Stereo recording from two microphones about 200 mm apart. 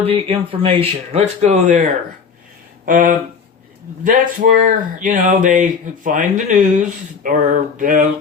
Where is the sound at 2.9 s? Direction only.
40° right (ahead or behind).